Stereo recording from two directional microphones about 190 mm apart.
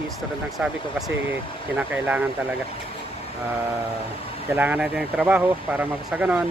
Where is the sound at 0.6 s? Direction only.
Centre (ahead or behind).